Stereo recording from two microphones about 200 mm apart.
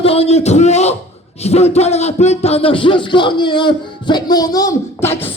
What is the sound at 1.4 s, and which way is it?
A man's voice, 30° left (ahead or behind).